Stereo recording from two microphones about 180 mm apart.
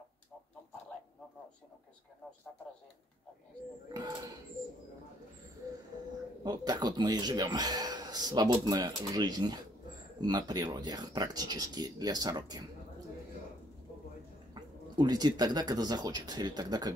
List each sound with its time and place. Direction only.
3.9 s speech: 20° right (ahead or behind)
6.4 s speech: 20° right (ahead or behind)
14.5 s speech: 25° right (ahead or behind)